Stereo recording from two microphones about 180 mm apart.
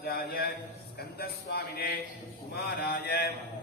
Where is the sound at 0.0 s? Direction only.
60° left (ahead or behind).